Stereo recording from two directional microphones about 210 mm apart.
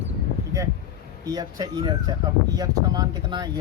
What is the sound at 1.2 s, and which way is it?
Speech, 20° right (ahead or behind).